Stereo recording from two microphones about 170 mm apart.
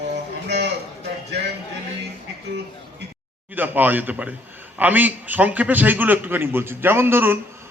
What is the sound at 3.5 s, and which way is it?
A man's voice, 10° right (ahead or behind).